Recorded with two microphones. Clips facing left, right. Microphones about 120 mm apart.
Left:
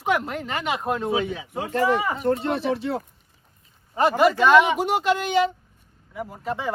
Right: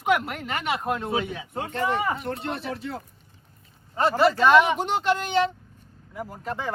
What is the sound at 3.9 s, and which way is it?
Speech, 10° left (ahead or behind).